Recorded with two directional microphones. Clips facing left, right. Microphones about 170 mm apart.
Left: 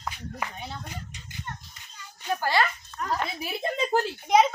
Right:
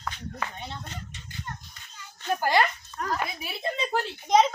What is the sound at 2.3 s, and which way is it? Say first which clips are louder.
Speech: right 2 dB; 15° right (ahead or behind).